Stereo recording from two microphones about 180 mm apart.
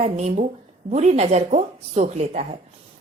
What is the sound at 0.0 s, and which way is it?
Speech, 40° right (ahead or behind).